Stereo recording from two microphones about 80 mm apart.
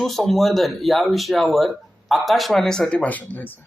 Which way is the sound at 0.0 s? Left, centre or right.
Centre.